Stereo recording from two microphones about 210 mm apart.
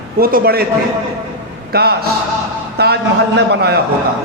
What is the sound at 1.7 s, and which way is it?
A man's voice, 50° right (ahead or behind).